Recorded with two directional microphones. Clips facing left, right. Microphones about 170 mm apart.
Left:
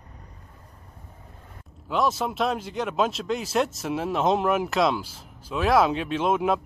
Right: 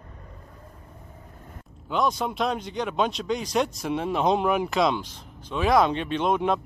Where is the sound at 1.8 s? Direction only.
5° left (ahead or behind).